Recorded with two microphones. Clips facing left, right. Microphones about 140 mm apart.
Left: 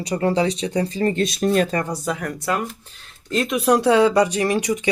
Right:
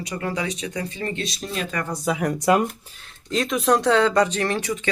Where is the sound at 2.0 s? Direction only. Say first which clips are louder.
Right 2 dB; 10° right (ahead or behind).